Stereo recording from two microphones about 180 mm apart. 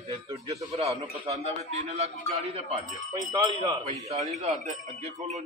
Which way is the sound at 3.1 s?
20° right (ahead or behind).